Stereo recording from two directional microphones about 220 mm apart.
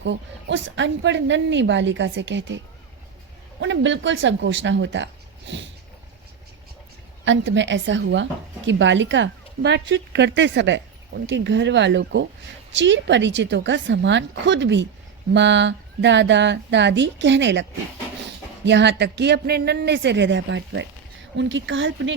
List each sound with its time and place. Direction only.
0.0 s a woman's voice: 55° right (ahead or behind)
3.6 s a woman's voice: 55° right (ahead or behind)
7.3 s a woman's voice: 55° right (ahead or behind)